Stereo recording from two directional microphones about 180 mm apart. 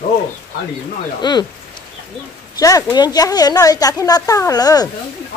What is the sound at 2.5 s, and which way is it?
A woman's voice, 20° left (ahead or behind).